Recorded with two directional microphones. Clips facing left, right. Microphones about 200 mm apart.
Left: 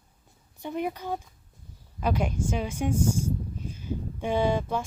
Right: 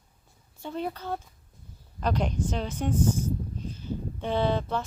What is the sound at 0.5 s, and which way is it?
Speech, 15° left (ahead or behind).